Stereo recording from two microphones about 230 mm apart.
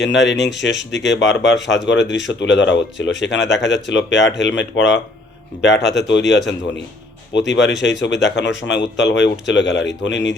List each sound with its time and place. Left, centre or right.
0.0 s speech: left